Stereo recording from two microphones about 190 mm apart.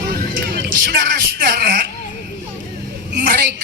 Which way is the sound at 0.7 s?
50° right (ahead or behind).